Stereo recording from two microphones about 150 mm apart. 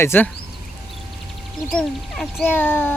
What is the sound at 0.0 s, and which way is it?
Child singing, 15° left (ahead or behind).